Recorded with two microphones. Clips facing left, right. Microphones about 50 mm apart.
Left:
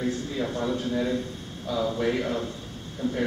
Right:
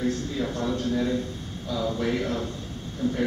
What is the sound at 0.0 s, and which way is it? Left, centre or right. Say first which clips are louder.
A man's voice: right 1 dB; centre.